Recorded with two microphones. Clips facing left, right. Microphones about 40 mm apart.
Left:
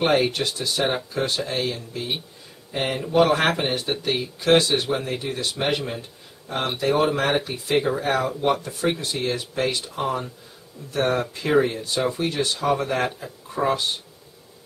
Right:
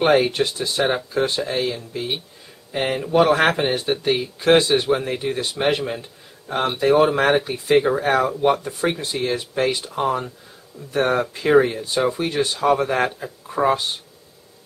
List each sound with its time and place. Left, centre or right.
0.0 s speech: centre
4.5 s speech: centre